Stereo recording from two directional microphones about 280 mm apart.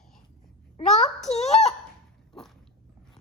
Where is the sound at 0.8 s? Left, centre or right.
Centre.